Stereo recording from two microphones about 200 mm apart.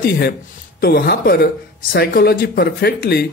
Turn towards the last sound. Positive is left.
turn(degrees=55)  # may be behind; listen again after turning